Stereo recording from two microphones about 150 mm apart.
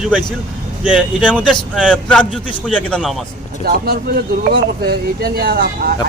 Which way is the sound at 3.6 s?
90° right.